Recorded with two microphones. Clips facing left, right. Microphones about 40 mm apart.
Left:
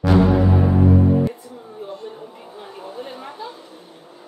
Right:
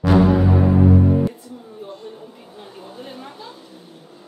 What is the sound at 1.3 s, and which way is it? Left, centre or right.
A woman's voice, centre.